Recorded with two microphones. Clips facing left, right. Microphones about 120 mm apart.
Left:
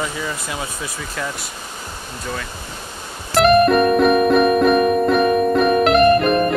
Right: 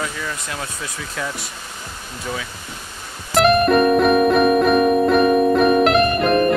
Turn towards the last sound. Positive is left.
turn(degrees=0)  # may be behind; listen again after turning